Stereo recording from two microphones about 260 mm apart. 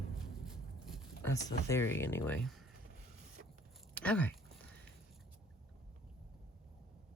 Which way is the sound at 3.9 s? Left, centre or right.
Centre.